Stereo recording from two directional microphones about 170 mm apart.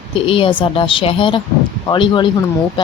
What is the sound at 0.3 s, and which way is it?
Speech, 30° left (ahead or behind).